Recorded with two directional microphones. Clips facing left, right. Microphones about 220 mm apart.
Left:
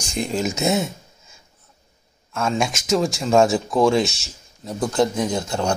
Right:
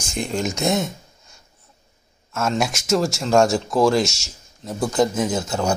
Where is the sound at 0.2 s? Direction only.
Centre (ahead or behind).